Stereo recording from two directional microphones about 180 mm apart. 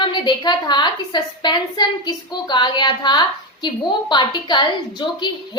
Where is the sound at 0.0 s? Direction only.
25° left (ahead or behind).